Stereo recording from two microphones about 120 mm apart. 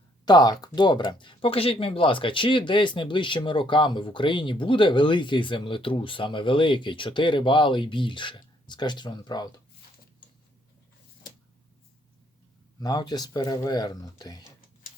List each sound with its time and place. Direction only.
0.3 s speech: 35° left (ahead or behind)
12.8 s speech: 35° left (ahead or behind)